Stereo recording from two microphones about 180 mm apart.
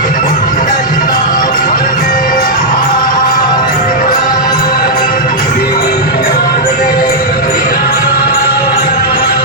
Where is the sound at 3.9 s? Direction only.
50° left (ahead or behind).